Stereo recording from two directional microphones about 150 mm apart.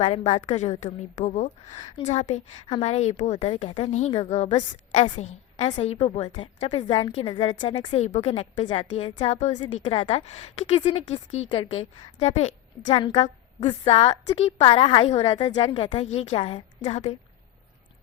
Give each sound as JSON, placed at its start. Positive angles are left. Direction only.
{"t": 0.0, "sound": "a woman's voice", "side_deg": 50}
{"t": 8.0, "sound": "a woman's voice", "side_deg": 45}
{"t": 9.3, "sound": "a woman's voice", "side_deg": 50}
{"t": 9.9, "sound": "a woman's voice", "side_deg": 35}
{"t": 15.4, "sound": "a woman's voice", "side_deg": 30}